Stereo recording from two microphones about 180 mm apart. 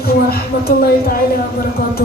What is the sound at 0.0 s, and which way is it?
Speech, 60° left (ahead or behind).